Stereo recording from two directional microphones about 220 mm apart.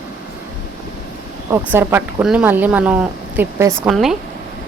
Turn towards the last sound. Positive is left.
turn(degrees=0)  # may be behind; listen again after turning